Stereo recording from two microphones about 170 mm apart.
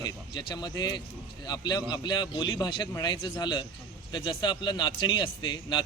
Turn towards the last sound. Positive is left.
turn(degrees=25)  # may be behind; listen again after turning